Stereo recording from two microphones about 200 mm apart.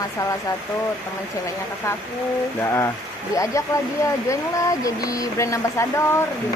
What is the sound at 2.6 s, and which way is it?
Speech, 15° left (ahead or behind).